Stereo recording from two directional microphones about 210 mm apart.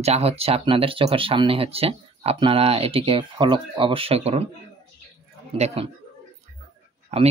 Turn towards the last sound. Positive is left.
turn(degrees=-30)  # may be behind; listen again after turning